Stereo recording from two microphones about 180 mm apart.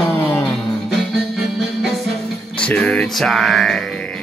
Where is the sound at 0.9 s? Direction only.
Centre (ahead or behind).